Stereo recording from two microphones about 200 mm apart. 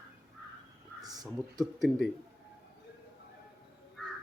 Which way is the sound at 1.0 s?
20° right (ahead or behind).